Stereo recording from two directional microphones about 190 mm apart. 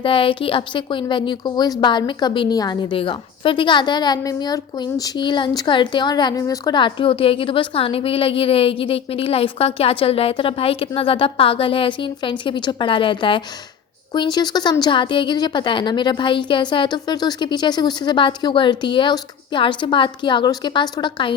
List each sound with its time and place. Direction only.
0.0 s a woman's voice: 30° left (ahead or behind)